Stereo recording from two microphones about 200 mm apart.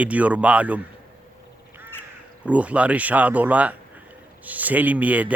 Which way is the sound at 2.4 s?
5° right (ahead or behind).